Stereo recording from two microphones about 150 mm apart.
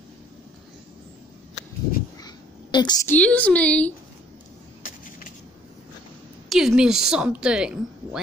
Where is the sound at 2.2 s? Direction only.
30° left (ahead or behind).